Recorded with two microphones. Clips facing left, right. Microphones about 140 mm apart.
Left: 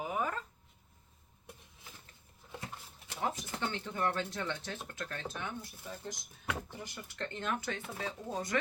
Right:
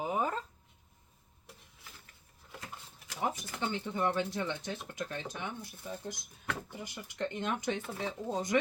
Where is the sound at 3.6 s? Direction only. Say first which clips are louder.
Right 2 dB; 15° right (ahead or behind).